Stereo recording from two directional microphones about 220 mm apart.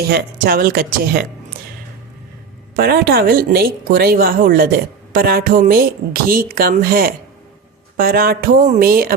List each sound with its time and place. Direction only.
0.1 s speech: 45° right (ahead or behind)
2.7 s speech: 45° right (ahead or behind)